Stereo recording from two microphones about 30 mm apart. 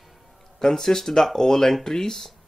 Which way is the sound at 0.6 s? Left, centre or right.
Centre.